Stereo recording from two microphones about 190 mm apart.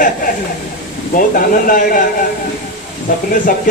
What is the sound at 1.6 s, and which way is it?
Speech, 45° left (ahead or behind).